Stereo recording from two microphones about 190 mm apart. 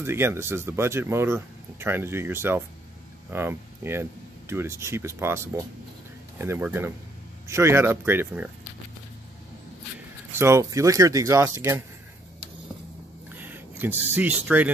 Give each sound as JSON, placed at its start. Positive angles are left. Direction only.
{"t": 0.0, "sound": "speech", "side_deg": -15}
{"t": 10.4, "sound": "speech", "side_deg": -15}
{"t": 13.3, "sound": "speech", "side_deg": -10}